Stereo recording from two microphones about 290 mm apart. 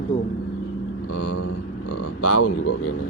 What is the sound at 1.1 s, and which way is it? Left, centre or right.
Speech, left.